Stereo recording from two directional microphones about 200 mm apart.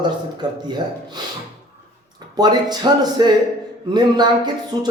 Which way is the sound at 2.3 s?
20° right (ahead or behind).